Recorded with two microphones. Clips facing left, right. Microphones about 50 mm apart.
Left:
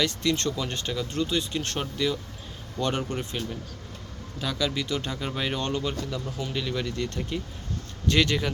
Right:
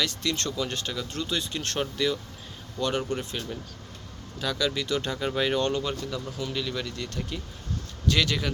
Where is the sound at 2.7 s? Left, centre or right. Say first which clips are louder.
Even; left.